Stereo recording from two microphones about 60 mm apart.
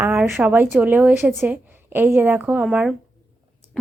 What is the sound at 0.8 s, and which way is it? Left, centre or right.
Speech, right.